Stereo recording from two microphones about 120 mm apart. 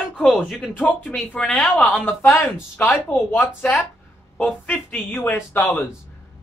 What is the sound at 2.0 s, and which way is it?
Speech, 20° left (ahead or behind).